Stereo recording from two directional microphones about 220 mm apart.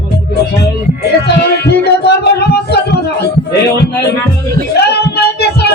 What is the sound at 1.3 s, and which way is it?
Music, 50° left (ahead or behind).